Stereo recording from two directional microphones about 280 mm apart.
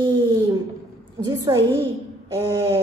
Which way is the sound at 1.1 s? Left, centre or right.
Centre.